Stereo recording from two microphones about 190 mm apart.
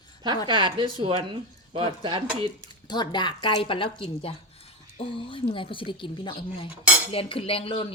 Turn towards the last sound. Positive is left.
turn(degrees=30)  # may be behind; listen again after turning